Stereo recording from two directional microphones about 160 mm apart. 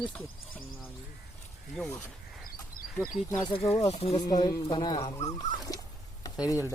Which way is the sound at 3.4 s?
35° left (ahead or behind).